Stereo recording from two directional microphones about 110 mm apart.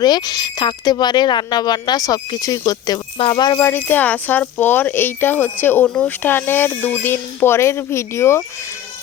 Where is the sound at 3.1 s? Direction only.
50° left (ahead or behind).